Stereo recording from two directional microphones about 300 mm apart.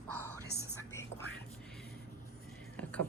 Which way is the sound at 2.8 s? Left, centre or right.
Centre.